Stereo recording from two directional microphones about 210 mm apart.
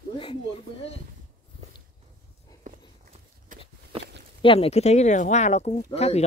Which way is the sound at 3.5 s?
40° right (ahead or behind).